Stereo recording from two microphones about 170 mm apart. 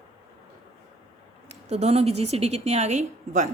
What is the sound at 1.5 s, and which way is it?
A woman's voice, 40° right (ahead or behind).